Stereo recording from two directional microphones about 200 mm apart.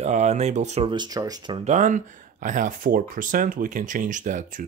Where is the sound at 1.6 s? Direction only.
35° right (ahead or behind).